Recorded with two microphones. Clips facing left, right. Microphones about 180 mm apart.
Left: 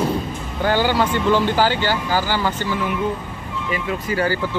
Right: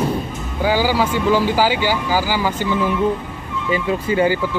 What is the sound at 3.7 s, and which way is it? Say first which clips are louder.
Speech: right 5 dB; 25° right (ahead or behind).